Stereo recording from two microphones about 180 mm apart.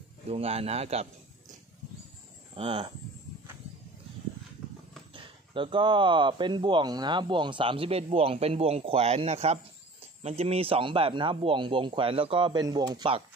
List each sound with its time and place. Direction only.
0.3 s speech: 35° right (ahead or behind)
2.5 s speech: 30° right (ahead or behind)
5.1 s speech: 30° right (ahead or behind)